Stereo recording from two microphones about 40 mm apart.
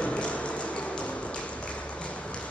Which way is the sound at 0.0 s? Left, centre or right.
Left.